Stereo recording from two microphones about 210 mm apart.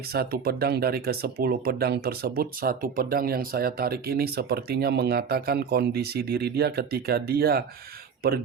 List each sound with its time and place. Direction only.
0.1 s speech: 50° right (ahead or behind)